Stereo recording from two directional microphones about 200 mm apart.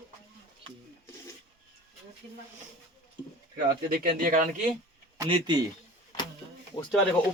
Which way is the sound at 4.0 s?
45° right (ahead or behind).